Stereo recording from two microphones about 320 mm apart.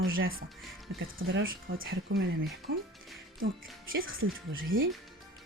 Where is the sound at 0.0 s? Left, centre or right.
Right.